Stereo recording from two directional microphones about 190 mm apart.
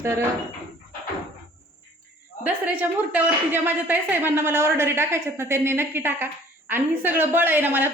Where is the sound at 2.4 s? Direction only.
10° right (ahead or behind).